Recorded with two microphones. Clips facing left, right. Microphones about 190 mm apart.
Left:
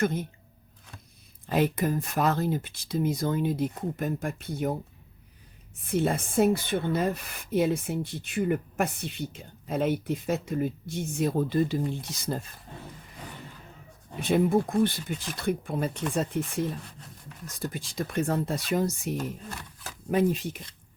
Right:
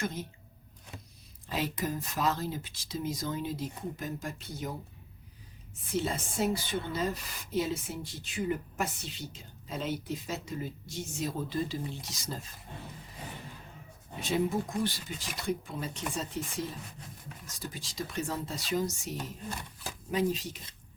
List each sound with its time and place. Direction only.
0.0 s speech: 55° left (ahead or behind)
1.5 s speech: 55° left (ahead or behind)
5.8 s speech: 55° left (ahead or behind)
14.2 s speech: 55° left (ahead or behind)